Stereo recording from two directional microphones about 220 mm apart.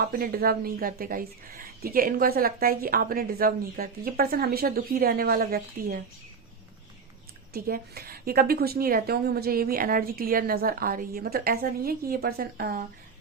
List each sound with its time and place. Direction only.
0.0 s a woman's voice: 40° right (ahead or behind)
7.5 s a woman's voice: 45° right (ahead or behind)